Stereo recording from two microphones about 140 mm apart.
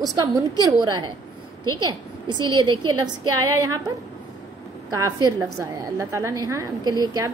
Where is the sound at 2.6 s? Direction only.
35° right (ahead or behind).